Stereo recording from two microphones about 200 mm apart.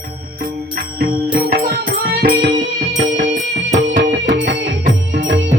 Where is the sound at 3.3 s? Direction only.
35° right (ahead or behind).